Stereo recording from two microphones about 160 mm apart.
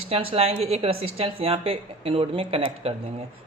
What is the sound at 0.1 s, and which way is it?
A woman's voice, 35° right (ahead or behind).